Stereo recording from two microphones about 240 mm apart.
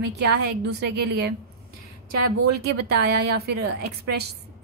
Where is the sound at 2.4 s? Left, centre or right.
Right.